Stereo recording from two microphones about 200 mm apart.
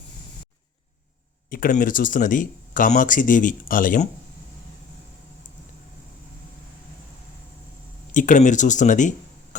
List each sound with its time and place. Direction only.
1.5 s speech: 45° left (ahead or behind)
5.5 s vehicle: 40° left (ahead or behind)
8.1 s speech: 40° left (ahead or behind)